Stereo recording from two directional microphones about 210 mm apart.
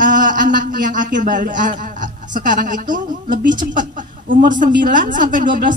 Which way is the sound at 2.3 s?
40° right (ahead or behind).